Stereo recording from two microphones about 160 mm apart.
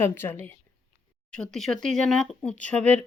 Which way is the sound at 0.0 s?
15° left (ahead or behind).